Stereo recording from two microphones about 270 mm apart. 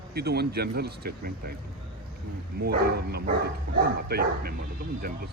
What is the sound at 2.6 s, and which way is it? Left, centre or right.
Speech, right.